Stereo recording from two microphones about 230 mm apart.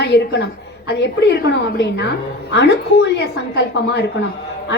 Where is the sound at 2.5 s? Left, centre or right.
Left.